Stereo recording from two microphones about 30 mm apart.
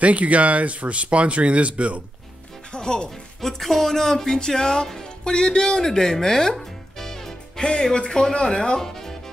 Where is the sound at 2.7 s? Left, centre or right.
Left.